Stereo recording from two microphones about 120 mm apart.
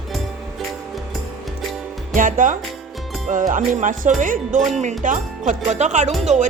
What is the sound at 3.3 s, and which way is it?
Speech, 90° right.